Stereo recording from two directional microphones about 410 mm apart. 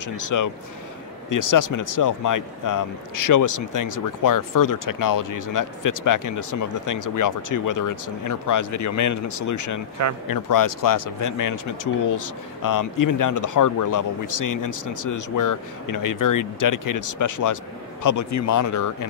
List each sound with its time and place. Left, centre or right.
0.0 s speech: left